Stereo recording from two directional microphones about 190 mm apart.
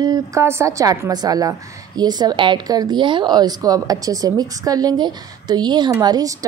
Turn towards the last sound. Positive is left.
turn(degrees=-20)  # may be behind; listen again after turning